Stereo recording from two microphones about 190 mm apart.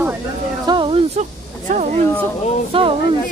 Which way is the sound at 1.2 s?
40° right (ahead or behind).